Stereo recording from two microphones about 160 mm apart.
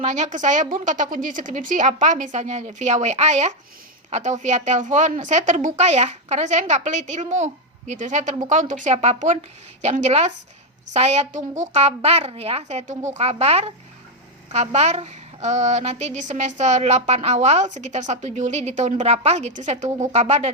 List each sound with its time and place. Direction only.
0.0 s a woman's voice: 45° right (ahead or behind)